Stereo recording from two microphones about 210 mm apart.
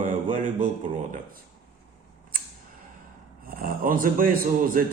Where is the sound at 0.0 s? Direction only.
40° right (ahead or behind).